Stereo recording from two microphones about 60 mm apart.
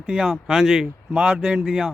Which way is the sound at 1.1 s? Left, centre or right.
Centre.